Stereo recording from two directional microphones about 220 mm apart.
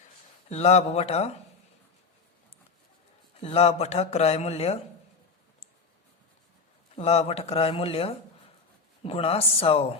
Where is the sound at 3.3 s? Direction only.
30° left (ahead or behind).